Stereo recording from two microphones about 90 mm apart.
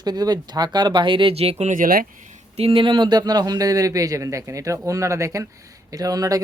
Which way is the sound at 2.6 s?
80° right.